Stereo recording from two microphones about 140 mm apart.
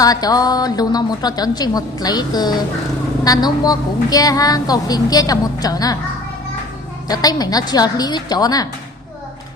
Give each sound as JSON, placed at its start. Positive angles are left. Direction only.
{"t": 0.0, "sound": "a woman's voice", "side_deg": 25}
{"t": 7.1, "sound": "a woman's voice", "side_deg": 30}